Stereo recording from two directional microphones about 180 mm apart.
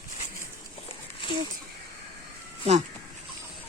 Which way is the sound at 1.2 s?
30° left (ahead or behind).